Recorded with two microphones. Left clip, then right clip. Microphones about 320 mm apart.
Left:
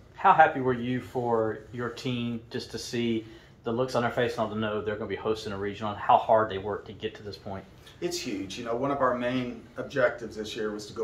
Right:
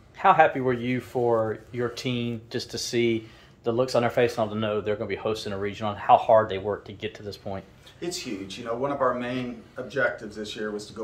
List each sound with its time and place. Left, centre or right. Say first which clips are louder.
0.2 s speech: right 1 dB; right
8.0 s speech: even; centre